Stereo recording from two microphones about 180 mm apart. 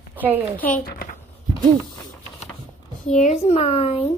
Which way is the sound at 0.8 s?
55° left (ahead or behind).